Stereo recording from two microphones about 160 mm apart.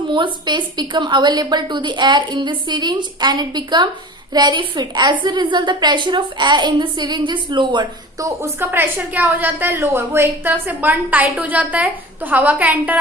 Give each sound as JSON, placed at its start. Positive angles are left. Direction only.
{"t": 0.1, "sound": "a woman's voice", "side_deg": -30}